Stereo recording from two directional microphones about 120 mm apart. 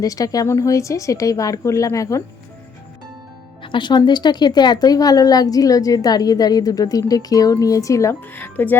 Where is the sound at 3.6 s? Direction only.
40° left (ahead or behind).